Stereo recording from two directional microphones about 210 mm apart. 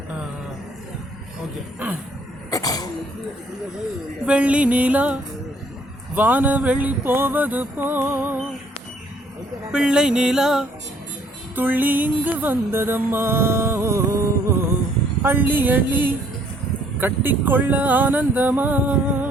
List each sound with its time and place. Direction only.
2.5 s a sound: 15° left (ahead or behind)
4.3 s music: 5° right (ahead or behind)
9.7 s music: 5° right (ahead or behind)